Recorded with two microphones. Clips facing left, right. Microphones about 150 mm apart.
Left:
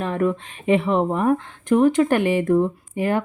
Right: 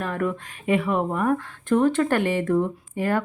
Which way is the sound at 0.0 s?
20° left (ahead or behind).